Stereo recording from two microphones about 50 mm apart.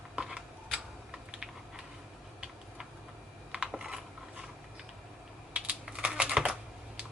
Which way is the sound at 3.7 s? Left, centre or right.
Centre.